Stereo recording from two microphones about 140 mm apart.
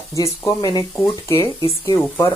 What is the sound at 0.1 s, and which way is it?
Speech, 20° left (ahead or behind).